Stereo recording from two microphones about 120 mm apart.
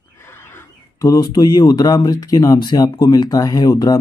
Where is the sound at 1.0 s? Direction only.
35° left (ahead or behind).